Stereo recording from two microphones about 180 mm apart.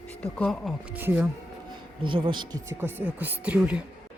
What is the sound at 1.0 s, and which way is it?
Speech, 10° right (ahead or behind).